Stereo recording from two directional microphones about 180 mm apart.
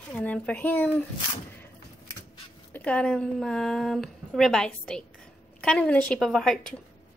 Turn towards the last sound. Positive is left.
turn(degrees=5)  # may be behind; listen again after turning